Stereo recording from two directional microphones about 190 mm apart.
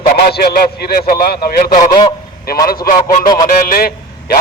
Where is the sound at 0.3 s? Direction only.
55° left (ahead or behind).